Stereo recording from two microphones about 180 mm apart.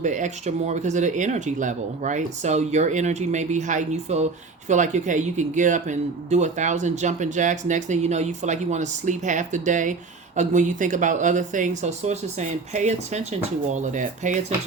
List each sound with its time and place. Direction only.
0.0 s speech: 45° right (ahead or behind)